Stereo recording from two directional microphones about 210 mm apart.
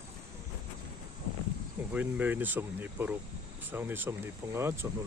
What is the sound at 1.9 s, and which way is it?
Speech, 10° right (ahead or behind).